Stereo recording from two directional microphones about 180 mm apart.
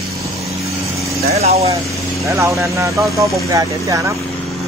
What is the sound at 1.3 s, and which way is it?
Vehicle, 35° right (ahead or behind).